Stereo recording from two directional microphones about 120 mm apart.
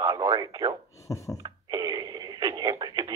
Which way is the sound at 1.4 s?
35° right (ahead or behind).